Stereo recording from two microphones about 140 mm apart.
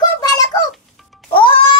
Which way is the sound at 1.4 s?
40° left (ahead or behind).